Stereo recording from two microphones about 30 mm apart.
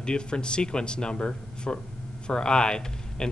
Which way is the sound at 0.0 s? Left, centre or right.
Left.